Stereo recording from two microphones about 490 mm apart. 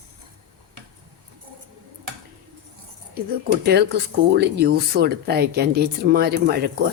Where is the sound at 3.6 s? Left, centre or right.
Centre.